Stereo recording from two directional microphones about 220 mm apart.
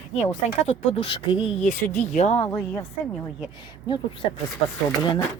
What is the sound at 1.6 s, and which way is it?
Speech, 35° left (ahead or behind).